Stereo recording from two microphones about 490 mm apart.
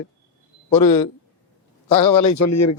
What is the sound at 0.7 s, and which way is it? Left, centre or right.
Speech, left.